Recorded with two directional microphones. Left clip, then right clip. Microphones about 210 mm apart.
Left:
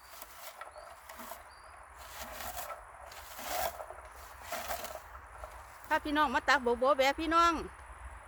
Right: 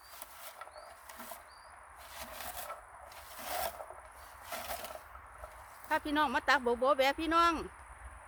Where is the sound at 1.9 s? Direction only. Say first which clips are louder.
Left 2 dB; 10° left (ahead or behind).